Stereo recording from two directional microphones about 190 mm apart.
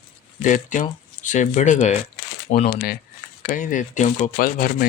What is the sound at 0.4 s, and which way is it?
Speech, 40° left (ahead or behind).